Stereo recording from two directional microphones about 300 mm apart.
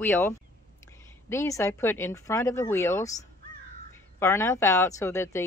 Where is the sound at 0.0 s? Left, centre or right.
Centre.